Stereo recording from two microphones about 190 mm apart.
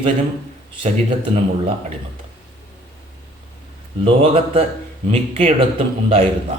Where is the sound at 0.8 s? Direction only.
35° right (ahead or behind).